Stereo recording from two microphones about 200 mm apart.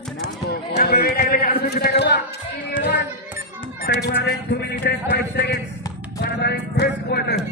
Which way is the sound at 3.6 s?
55° left (ahead or behind).